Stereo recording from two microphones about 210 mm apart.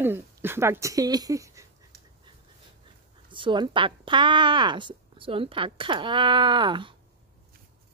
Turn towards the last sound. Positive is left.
turn(degrees=-25)  # may be behind; listen again after turning